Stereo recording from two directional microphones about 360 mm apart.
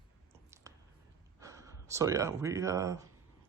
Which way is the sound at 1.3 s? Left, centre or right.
Centre.